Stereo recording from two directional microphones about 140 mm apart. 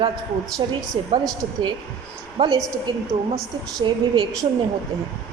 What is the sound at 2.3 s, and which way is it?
A woman's voice, 40° right (ahead or behind).